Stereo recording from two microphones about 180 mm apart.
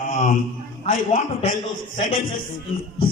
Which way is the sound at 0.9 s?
45° left (ahead or behind).